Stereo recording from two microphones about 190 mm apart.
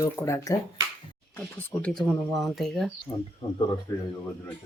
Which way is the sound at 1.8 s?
5° left (ahead or behind).